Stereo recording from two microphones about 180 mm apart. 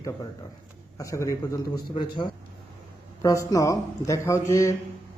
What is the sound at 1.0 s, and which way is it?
Speech, 15° left (ahead or behind).